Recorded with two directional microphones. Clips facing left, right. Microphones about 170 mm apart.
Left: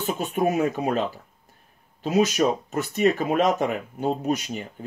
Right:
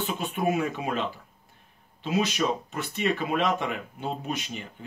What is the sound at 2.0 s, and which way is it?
Speech, 40° left (ahead or behind).